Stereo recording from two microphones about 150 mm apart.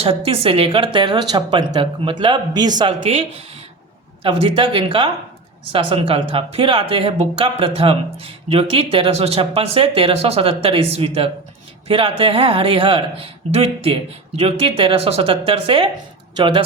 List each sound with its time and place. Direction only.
0.0 s speech: 40° right (ahead or behind)
0.9 s speech: 30° right (ahead or behind)